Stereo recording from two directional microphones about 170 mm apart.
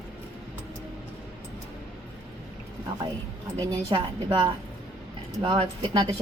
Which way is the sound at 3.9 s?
30° right (ahead or behind).